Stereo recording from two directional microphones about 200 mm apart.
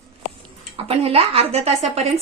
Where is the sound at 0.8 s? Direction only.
30° right (ahead or behind).